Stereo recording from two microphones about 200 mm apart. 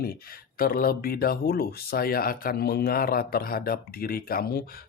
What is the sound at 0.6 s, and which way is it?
Speech, 45° left (ahead or behind).